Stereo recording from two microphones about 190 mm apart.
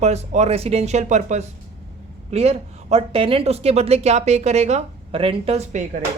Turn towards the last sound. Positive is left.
turn(degrees=-35)  # may be behind; listen again after turning